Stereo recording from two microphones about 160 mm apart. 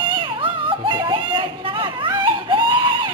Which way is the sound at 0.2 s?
30° right (ahead or behind).